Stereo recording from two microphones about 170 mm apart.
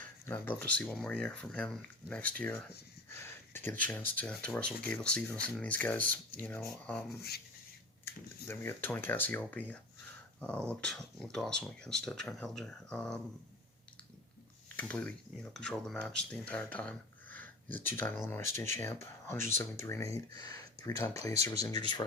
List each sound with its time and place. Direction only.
0.3 s speech: 10° left (ahead or behind)
7.2 s speech: 65° left (ahead or behind)
8.0 s speech: 15° left (ahead or behind)
14.8 s speech: 10° left (ahead or behind); by 22.0 s 25° left (ahead or behind)